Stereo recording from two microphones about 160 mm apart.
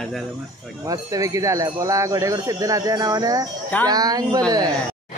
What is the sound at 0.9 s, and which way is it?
Speech, 20° right (ahead or behind).